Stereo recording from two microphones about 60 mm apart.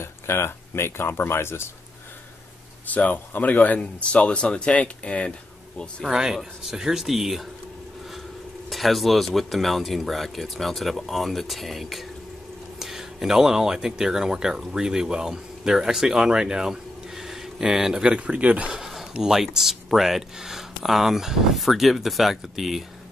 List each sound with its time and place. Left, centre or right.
0.0 s speech: left
2.9 s speech: left
6.0 s speech: centre
8.6 s speech: centre
18.7 s a sound: centre
19.1 s speech: centre